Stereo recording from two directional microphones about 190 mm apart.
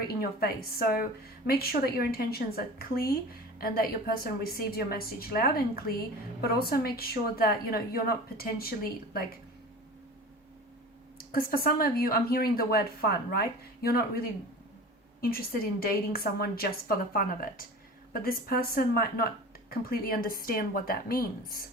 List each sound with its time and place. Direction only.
0.2 s a woman's voice: 55° left (ahead or behind)
11.3 s a woman's voice: 50° left (ahead or behind)